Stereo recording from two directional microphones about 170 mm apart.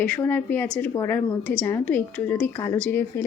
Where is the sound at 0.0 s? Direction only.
10° left (ahead or behind).